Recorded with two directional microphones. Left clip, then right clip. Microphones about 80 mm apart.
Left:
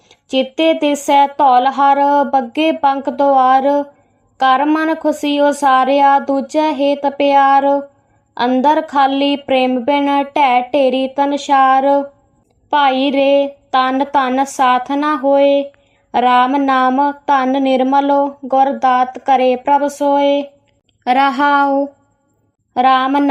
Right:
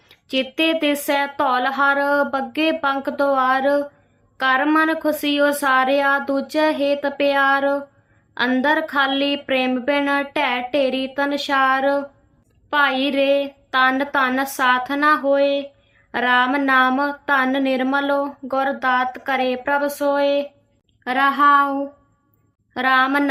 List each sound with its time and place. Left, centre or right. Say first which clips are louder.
0.1 s a woman's voice: left 6 dB; left
21.0 s speech: left 4 dB; left
22.7 s speech: left 5 dB; left